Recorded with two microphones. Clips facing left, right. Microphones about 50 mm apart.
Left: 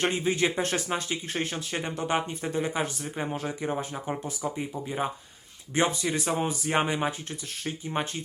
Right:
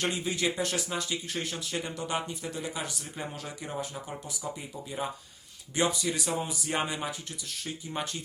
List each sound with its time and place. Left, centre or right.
0.0 s speech: left